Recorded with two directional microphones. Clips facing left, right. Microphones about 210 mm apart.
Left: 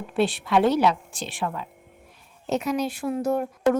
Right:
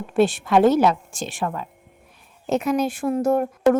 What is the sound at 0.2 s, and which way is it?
A woman's voice, 45° right (ahead or behind).